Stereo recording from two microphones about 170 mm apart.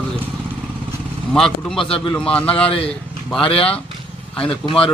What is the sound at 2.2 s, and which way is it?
A man's voice, 5° left (ahead or behind).